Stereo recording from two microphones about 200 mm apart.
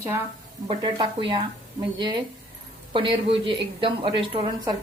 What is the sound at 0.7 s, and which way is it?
Speech, 25° right (ahead or behind).